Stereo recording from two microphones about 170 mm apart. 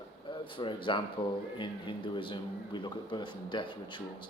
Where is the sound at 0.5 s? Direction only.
30° left (ahead or behind).